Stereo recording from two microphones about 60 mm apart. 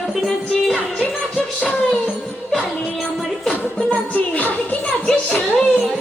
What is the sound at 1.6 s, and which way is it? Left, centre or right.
Music, centre.